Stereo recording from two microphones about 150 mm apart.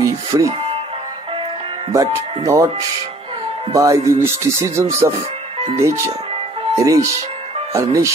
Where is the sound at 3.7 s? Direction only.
20° right (ahead or behind).